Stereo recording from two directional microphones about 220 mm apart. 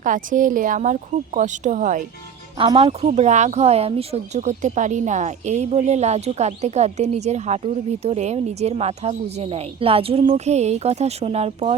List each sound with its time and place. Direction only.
0.0 s speech: 35° right (ahead or behind)
2.6 s speech: 25° right (ahead or behind)